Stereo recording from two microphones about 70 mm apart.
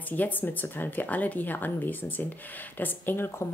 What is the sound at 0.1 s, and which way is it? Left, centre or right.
Speech, left.